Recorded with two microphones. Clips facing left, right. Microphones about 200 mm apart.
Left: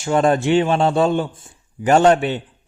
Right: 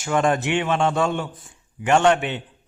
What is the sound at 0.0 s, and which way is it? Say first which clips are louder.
A man's voice: left 4 dB; 35° left (ahead or behind).